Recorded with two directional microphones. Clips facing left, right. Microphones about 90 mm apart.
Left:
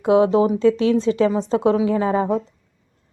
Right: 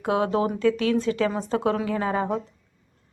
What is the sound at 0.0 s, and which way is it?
A woman's voice, 25° left (ahead or behind).